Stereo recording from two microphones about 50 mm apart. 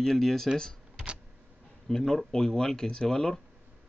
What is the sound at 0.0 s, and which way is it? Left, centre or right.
Speech, centre.